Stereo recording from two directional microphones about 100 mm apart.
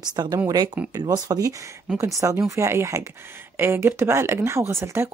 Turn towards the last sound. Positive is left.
turn(degrees=-25)  # may be behind; listen again after turning